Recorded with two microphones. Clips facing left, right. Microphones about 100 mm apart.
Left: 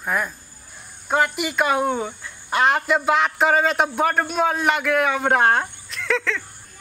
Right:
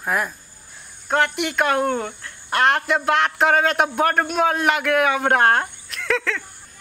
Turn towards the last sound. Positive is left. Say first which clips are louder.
# even
turn(degrees=0)  # may be behind; listen again after turning